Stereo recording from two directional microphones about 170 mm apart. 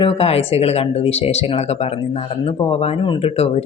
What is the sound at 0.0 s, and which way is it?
Speech, 35° left (ahead or behind).